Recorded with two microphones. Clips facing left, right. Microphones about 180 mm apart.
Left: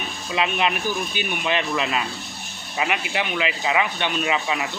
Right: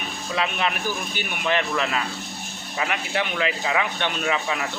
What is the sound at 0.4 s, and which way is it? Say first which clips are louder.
Speech: left 3 dB; 20° left (ahead or behind).